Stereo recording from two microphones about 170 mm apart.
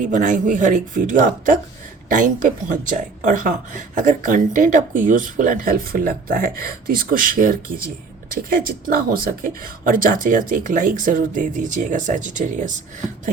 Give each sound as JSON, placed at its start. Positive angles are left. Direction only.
{"t": 0.0, "sound": "speech", "side_deg": -50}